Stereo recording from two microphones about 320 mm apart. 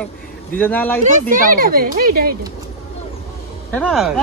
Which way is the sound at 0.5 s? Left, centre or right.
Centre.